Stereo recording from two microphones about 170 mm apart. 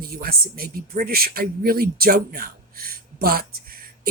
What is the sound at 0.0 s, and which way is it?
Speech, 60° right (ahead or behind).